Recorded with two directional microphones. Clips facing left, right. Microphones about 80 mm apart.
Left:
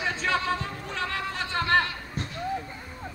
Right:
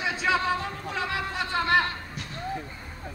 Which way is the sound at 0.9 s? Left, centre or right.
Centre.